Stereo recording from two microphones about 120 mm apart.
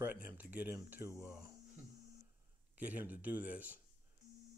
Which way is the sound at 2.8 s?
15° right (ahead or behind).